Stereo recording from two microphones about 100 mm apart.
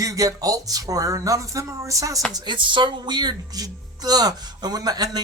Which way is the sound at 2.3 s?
45° right (ahead or behind).